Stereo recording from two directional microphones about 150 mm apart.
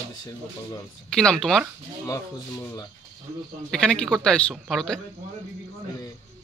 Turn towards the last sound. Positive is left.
turn(degrees=0)  # may be behind; listen again after turning